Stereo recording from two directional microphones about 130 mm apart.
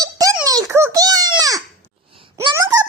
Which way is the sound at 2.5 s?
30° right (ahead or behind).